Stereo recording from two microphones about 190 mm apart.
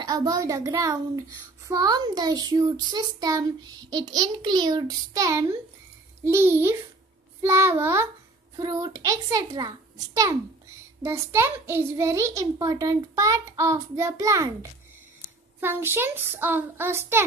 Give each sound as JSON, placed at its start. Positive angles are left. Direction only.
{"t": 0.0, "sound": "a child's voice", "side_deg": -20}